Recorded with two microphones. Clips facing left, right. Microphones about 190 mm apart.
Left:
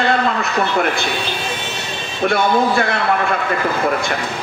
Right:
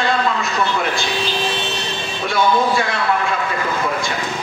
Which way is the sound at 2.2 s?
60° left (ahead or behind).